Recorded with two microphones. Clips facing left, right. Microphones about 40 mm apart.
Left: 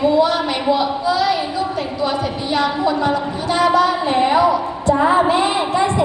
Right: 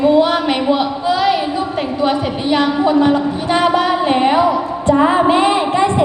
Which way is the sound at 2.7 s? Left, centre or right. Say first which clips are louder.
Right 5 dB; right.